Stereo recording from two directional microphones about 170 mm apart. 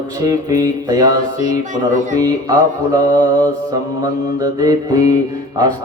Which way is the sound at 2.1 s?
20° right (ahead or behind).